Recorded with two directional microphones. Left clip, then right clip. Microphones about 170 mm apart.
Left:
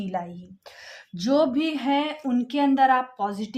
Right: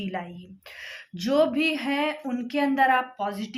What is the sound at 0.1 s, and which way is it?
Speech, 25° left (ahead or behind).